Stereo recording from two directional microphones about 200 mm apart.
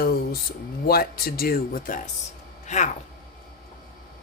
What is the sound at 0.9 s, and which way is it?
Speech, 50° left (ahead or behind).